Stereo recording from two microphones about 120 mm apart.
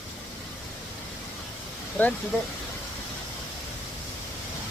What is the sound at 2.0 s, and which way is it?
Speech, 15° left (ahead or behind).